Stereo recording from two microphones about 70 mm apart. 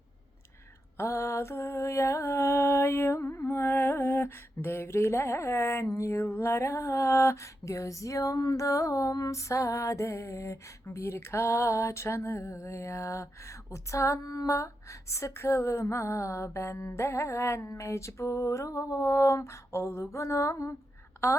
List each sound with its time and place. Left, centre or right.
0.9 s mantra: left
9.5 s music: left
15.1 s music: left
21.2 s mantra: left